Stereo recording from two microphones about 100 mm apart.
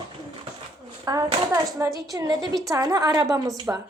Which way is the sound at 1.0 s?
35° right (ahead or behind).